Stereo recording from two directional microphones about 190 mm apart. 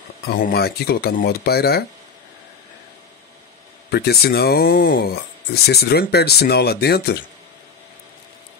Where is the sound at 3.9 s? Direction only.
55° left (ahead or behind).